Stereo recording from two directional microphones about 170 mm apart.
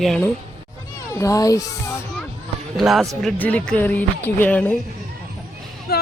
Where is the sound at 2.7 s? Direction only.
Centre (ahead or behind).